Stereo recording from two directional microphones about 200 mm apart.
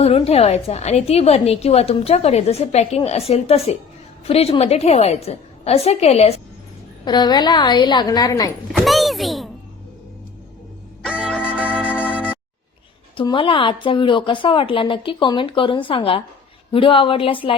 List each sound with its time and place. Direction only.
0.0 s a woman's voice: 30° left (ahead or behind)
8.7 s a sound: centre (ahead or behind)
11.0 s music: centre (ahead or behind)
12.0 s organ: 5° right (ahead or behind)
13.1 s a woman's voice: 25° left (ahead or behind)